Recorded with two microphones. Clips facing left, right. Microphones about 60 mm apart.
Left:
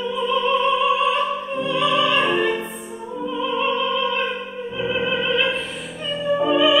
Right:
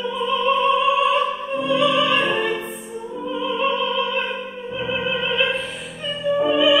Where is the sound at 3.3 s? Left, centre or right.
Centre.